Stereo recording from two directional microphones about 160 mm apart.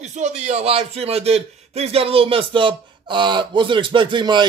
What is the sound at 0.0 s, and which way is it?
Speech, 45° right (ahead or behind).